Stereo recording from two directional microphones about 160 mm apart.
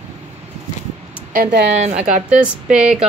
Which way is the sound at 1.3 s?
80° right.